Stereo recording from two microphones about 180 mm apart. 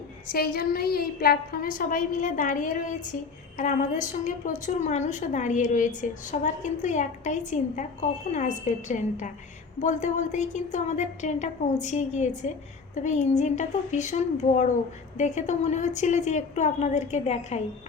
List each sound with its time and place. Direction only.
0.3 s a woman's voice: 55° left (ahead or behind); by 17.6 s 40° left (ahead or behind)